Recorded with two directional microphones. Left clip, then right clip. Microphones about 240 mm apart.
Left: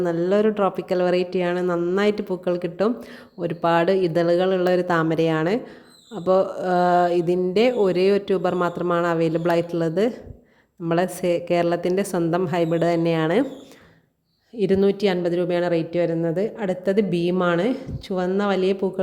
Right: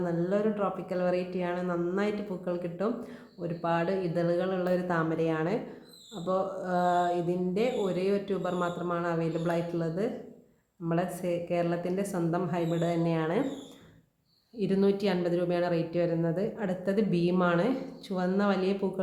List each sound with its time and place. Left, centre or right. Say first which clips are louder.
0.0 s a woman's voice: left 9 dB; left
14.6 s a woman's voice: left 8 dB; left